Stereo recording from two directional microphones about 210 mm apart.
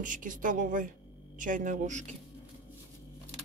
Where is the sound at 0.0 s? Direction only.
40° right (ahead or behind).